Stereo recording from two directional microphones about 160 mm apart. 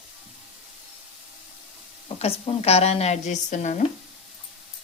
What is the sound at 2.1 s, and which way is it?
A woman's voice, 40° left (ahead or behind).